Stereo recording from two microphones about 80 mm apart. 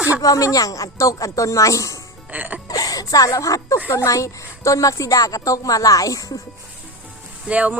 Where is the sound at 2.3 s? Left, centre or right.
Right.